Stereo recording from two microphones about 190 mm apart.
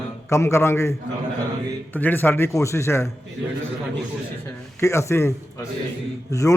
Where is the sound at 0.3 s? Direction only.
15° left (ahead or behind).